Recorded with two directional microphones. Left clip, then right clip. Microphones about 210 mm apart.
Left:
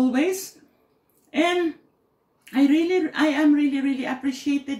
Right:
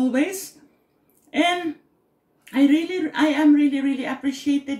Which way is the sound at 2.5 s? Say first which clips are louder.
Even; centre (ahead or behind).